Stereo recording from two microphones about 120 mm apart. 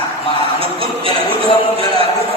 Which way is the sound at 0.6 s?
50° right (ahead or behind).